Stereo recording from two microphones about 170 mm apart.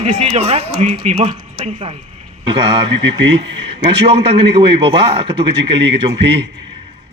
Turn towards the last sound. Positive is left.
turn(degrees=-90)